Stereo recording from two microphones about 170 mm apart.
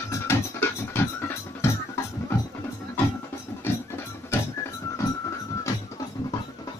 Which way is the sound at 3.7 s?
15° left (ahead or behind).